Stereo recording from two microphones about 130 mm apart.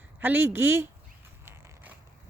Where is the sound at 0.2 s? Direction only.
15° right (ahead or behind).